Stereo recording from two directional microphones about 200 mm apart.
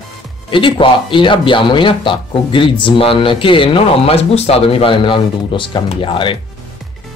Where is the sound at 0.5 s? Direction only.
25° left (ahead or behind).